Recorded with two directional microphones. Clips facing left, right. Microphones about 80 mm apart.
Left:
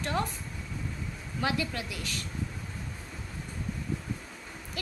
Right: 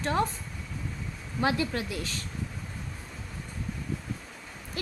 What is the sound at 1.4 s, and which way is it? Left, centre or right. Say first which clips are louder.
Speech: right 4 dB; right.